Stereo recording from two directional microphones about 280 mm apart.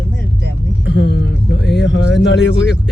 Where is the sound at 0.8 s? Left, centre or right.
Left.